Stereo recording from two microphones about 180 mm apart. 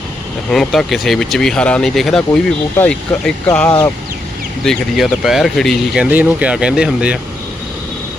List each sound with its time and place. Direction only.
0.5 s speech: centre (ahead or behind)
3.7 s speech: 25° left (ahead or behind)
4.6 s speech: centre (ahead or behind)